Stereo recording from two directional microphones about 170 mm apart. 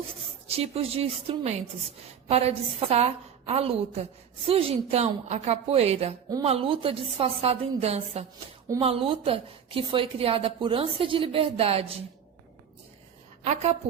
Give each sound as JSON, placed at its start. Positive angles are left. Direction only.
{"t": 0.4, "sound": "a woman's voice", "side_deg": -35}
{"t": 13.4, "sound": "a woman's voice", "side_deg": -40}